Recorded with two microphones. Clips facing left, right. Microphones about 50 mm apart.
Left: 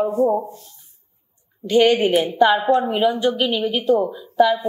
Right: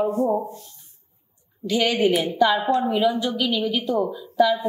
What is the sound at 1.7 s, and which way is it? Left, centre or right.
Speech, left.